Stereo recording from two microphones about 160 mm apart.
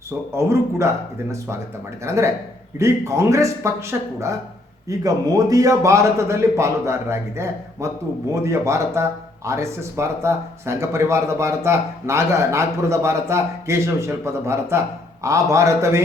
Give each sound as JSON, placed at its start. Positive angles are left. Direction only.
{"t": 0.3, "sound": "a man's voice", "side_deg": -15}